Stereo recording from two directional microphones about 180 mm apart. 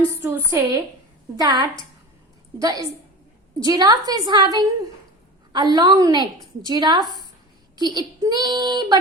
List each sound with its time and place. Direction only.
0.2 s a woman's voice: 15° right (ahead or behind)